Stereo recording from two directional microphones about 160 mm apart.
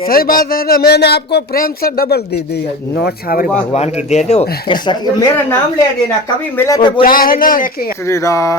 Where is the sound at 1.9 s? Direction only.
80° left.